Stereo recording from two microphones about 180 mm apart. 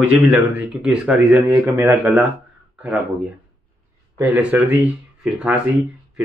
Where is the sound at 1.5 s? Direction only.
20° right (ahead or behind).